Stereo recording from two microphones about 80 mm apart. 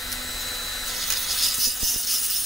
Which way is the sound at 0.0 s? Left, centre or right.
Centre.